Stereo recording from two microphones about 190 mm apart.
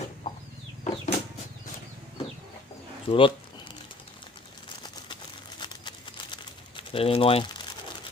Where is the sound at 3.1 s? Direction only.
30° left (ahead or behind).